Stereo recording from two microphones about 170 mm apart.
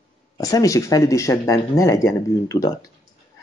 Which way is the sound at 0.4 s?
20° left (ahead or behind).